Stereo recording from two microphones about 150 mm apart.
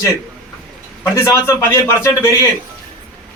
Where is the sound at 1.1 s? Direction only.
20° left (ahead or behind).